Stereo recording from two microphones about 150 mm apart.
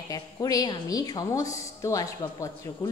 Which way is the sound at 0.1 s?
25° left (ahead or behind).